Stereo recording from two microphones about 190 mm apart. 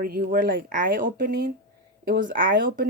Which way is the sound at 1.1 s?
55° right (ahead or behind).